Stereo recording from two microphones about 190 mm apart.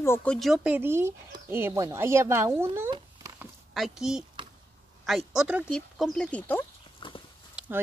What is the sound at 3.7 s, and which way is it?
Speech, centre (ahead or behind).